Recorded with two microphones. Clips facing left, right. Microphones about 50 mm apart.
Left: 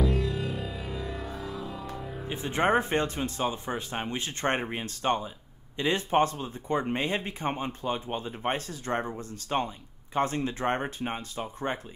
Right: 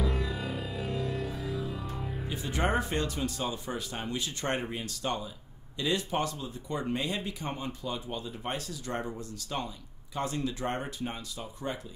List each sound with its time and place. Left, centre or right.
0.0 s music: centre
2.2 s speech: left